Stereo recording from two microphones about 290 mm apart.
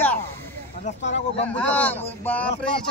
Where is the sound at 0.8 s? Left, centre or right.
Left.